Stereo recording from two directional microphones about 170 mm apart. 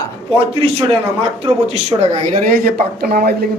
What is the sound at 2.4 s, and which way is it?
Speech, 60° right (ahead or behind).